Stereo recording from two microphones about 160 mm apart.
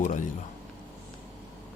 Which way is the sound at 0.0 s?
50° left (ahead or behind).